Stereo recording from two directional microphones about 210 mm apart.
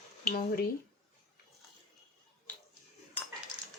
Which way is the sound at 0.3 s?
45° left (ahead or behind).